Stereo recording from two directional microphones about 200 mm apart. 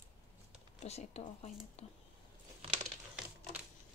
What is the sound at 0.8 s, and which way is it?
A woman's voice, 30° left (ahead or behind).